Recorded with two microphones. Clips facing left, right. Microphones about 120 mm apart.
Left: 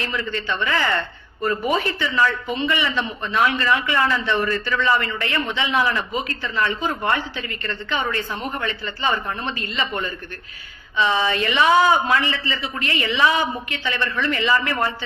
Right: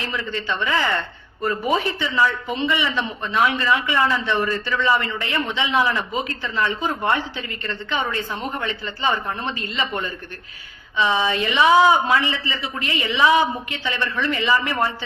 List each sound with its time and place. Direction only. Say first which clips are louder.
0.4 s a woman's voice: right 1 dB; 20° right (ahead or behind)
9.6 s a woman's voice: even; 15° right (ahead or behind)